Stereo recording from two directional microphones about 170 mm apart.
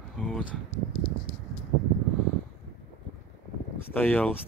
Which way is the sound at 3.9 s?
10° left (ahead or behind).